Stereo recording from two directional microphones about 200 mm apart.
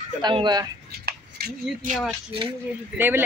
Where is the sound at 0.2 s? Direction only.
20° right (ahead or behind).